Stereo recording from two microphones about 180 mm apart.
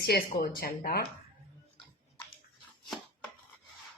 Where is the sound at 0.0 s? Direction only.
60° left (ahead or behind).